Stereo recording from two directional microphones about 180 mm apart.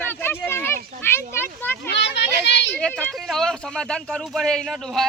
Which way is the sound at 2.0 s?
75° left (ahead or behind).